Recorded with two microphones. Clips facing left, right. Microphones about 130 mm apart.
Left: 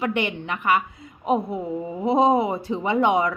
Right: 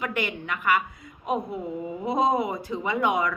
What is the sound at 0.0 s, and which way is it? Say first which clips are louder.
A woman's voice: left 5 dB; 25° left (ahead or behind).